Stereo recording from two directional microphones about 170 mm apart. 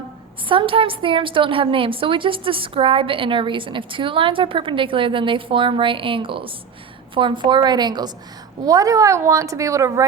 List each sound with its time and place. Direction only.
0.4 s a woman's voice: 30° right (ahead or behind)